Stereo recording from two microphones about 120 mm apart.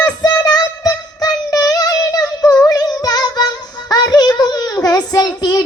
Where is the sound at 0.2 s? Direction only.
35° left (ahead or behind).